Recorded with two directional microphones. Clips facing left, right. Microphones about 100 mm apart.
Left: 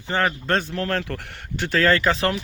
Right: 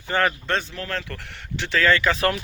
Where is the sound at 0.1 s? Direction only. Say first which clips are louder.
Even; 20° left (ahead or behind).